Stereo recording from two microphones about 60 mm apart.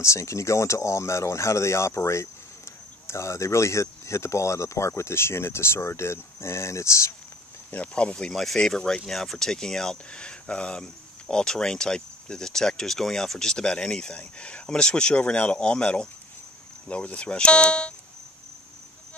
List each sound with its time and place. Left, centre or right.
0.0 s speech: left
7.7 s speech: left